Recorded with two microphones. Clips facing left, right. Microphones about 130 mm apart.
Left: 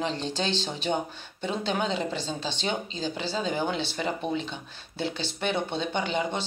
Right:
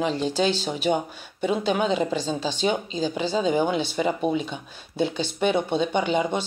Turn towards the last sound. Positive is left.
turn(degrees=-15)  # may be behind; listen again after turning